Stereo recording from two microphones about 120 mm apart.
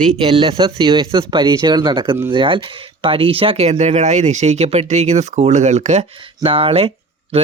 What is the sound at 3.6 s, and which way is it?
Speech, 70° right (ahead or behind).